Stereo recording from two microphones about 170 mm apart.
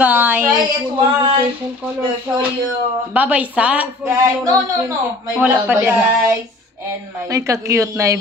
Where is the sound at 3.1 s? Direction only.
10° right (ahead or behind).